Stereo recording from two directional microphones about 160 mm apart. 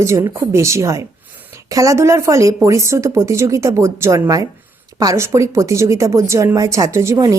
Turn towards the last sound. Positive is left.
turn(degrees=-20)  # may be behind; listen again after turning